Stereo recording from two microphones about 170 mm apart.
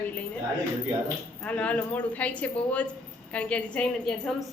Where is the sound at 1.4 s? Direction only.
10° left (ahead or behind).